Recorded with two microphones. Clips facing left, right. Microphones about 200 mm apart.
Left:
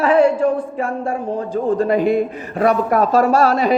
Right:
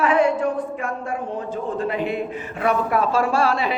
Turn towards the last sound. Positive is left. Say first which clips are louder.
# left 6 dB
turn(degrees=40)  # may be behind; listen again after turning